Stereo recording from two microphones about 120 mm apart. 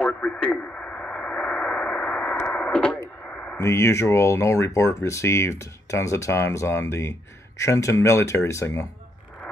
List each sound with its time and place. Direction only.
0.0 s radio: 10° left (ahead or behind)
3.5 s speech: 25° left (ahead or behind)